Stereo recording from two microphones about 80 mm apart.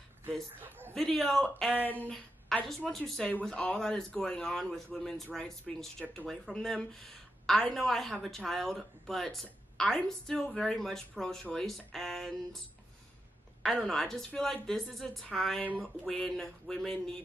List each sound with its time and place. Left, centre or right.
0.6 s a sound: right
0.9 s a woman's voice: centre
13.7 s a man's voice: centre